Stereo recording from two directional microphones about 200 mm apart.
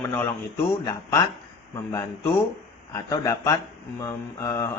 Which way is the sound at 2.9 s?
15° left (ahead or behind).